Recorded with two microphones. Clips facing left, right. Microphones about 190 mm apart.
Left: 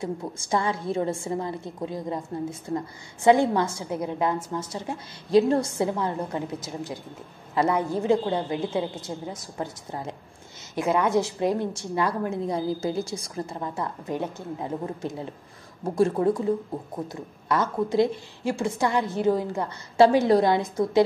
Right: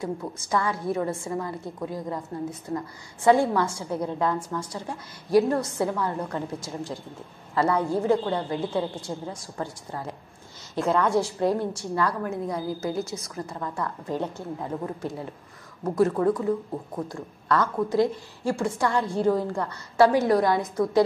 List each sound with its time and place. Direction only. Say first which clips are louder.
0.0 s a woman's voice: even; 25° left (ahead or behind)
3.3 s a woman's voice: left 1 dB; 20° left (ahead or behind)
13.6 s a woman's voice: even; 20° left (ahead or behind)